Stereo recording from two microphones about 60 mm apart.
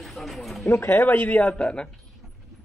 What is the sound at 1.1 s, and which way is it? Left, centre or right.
Speech, left.